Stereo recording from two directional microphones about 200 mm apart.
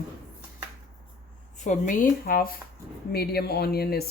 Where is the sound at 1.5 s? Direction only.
40° left (ahead or behind).